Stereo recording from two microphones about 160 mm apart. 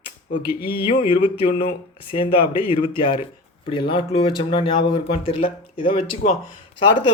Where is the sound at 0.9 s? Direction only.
35° left (ahead or behind).